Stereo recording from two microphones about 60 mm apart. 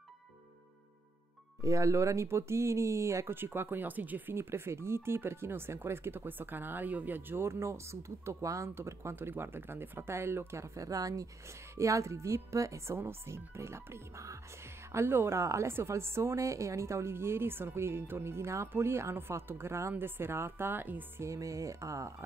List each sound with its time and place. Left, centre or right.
1.6 s speech: right
3.3 s speech: right
4.4 s speech: right
7.4 s a woman's voice: right
8.7 s a woman's voice: right
11.7 s a woman's voice: right
21.2 s speech: right